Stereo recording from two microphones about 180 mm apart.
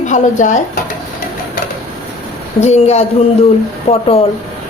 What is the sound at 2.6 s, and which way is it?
A woman's voice, 35° left (ahead or behind).